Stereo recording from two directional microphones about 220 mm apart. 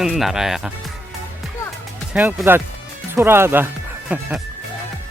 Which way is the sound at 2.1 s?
5° right (ahead or behind).